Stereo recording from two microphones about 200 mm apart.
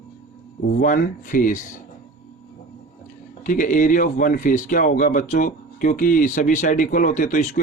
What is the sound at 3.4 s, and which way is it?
A man's voice, 40° left (ahead or behind).